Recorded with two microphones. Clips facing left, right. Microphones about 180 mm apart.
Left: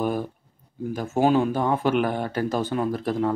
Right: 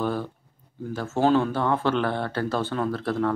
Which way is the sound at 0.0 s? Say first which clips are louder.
Left 2 dB; 15° left (ahead or behind).